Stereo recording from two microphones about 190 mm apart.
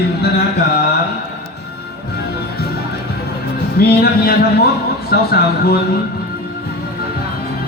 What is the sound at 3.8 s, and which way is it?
Music, 55° left (ahead or behind).